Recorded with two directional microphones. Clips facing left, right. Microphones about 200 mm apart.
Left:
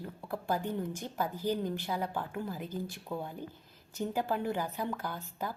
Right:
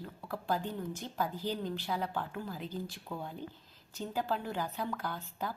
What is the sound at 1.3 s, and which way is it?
Speech, 50° left (ahead or behind).